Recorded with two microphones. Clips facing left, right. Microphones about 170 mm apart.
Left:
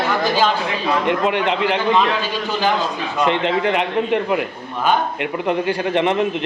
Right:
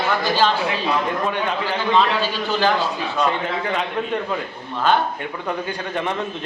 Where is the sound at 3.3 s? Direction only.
80° left.